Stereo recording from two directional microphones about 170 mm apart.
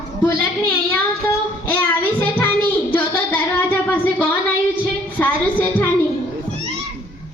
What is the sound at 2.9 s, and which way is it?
Music, 10° left (ahead or behind).